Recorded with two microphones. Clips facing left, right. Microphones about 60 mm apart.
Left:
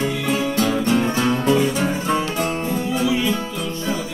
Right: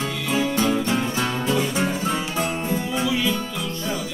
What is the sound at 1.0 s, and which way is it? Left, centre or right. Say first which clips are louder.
Music: left 5 dB; left.